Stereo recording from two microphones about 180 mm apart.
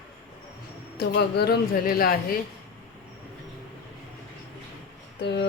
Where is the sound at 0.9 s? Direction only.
65° left (ahead or behind).